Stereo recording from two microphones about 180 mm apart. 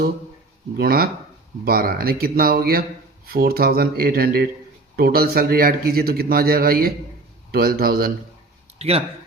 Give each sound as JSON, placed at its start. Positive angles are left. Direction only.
{"t": 0.8, "sound": "a man's voice", "side_deg": -55}
{"t": 8.8, "sound": "speech", "side_deg": -35}